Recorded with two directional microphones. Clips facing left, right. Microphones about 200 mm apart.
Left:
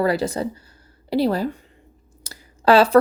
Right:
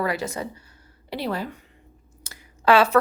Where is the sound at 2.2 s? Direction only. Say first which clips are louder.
Left 3 dB; 35° left (ahead or behind).